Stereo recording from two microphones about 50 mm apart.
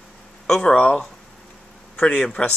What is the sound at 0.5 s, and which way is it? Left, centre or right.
Speech, centre.